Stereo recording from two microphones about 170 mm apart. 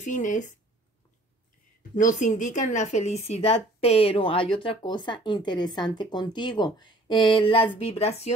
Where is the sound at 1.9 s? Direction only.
50° left (ahead or behind).